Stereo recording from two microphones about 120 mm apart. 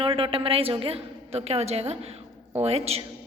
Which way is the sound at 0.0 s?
50° right (ahead or behind).